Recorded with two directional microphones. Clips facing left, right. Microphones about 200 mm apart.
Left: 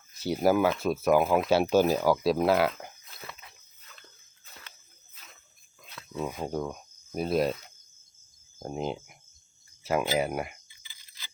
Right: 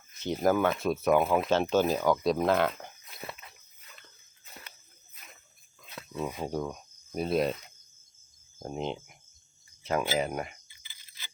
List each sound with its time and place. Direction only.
0.2 s speech: 10° left (ahead or behind)
6.1 s speech: centre (ahead or behind)